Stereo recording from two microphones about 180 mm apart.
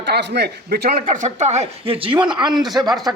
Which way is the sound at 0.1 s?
70° right (ahead or behind).